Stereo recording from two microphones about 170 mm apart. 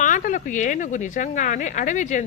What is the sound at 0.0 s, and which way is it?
A woman's voice, 50° left (ahead or behind).